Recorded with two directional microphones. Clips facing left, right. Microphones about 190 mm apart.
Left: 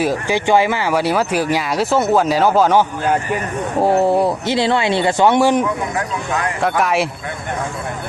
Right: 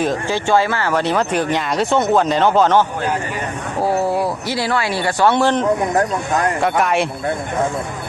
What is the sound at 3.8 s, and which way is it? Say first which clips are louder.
Speech: left 4 dB; 25° left (ahead or behind).